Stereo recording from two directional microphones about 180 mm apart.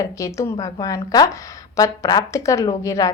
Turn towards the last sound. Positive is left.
turn(degrees=20)  # may be behind; listen again after turning